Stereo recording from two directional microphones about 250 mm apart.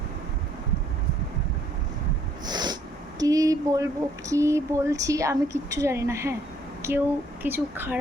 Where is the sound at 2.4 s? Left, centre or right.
Centre.